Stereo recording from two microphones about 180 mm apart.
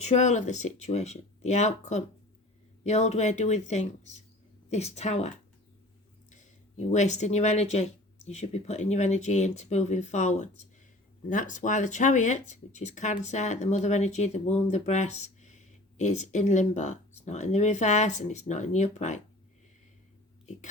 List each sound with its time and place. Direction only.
0.0 s speech: 40° left (ahead or behind)
6.3 s speech: 40° left (ahead or behind)